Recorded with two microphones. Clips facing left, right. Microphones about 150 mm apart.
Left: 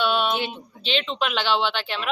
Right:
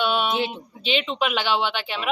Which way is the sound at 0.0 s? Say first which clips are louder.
Even; 10° right (ahead or behind).